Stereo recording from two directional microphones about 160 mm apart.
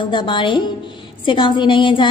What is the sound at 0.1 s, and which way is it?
A woman's voice, 30° left (ahead or behind).